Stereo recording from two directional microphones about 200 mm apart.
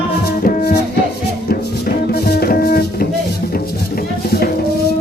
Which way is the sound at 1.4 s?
50° left (ahead or behind).